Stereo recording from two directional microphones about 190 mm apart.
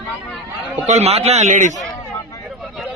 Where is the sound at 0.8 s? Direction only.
35° right (ahead or behind).